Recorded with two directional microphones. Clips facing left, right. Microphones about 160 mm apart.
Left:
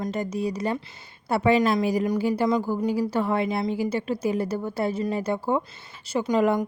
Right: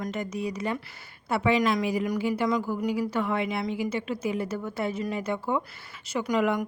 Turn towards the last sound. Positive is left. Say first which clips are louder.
# left 4 dB
turn(degrees=30)  # may be behind; listen again after turning